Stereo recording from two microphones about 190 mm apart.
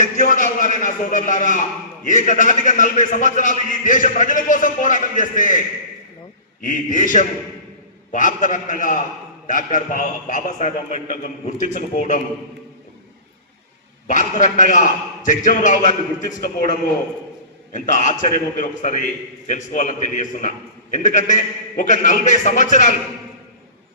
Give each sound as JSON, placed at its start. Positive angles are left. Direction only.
{"t": 0.2, "sound": "a sound", "side_deg": 45}
{"t": 2.0, "sound": "a man's voice", "side_deg": 40}
{"t": 14.1, "sound": "a man's voice", "side_deg": 40}